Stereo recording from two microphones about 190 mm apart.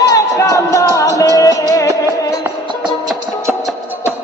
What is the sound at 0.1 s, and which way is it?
Music, 15° left (ahead or behind).